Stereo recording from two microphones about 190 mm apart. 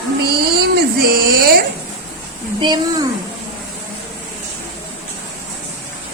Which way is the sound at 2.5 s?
25° right (ahead or behind).